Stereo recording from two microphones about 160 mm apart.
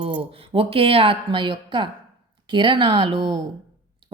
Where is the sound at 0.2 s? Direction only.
35° right (ahead or behind).